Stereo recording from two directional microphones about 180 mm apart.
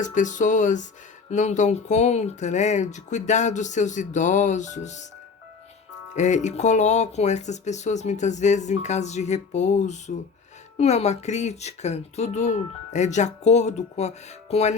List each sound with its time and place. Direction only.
0.0 s speech: 45° left (ahead or behind)
6.1 s speech: 40° left (ahead or behind)